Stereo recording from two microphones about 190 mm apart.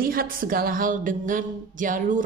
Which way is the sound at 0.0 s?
50° right (ahead or behind).